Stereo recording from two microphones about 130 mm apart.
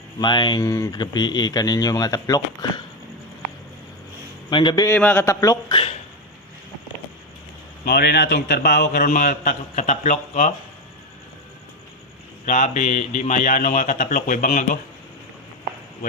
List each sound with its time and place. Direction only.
0.2 s speech: 35° left (ahead or behind)
4.4 s a man's voice: 35° left (ahead or behind)
4.9 s speech: 15° left (ahead or behind)
5.7 s a sound: 45° left (ahead or behind)
8.4 s a man's voice: 90° left; by 10.5 s 65° left (ahead or behind)
12.5 s speech: 70° left (ahead or behind); by 14.8 s 90° left